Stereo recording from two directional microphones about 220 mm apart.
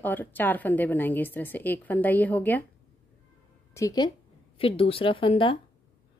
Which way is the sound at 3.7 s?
15° left (ahead or behind).